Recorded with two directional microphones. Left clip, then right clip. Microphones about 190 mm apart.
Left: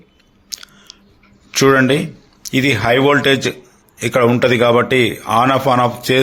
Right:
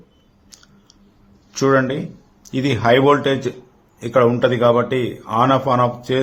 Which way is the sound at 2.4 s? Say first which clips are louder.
Left 3 dB; 15° left (ahead or behind).